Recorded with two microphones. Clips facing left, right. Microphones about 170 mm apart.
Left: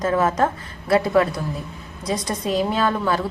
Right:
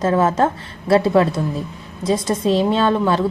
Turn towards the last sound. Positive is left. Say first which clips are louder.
# right 4 dB
turn(degrees=-25)  # may be behind; listen again after turning